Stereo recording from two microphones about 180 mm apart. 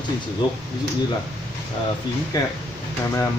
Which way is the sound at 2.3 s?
20° left (ahead or behind).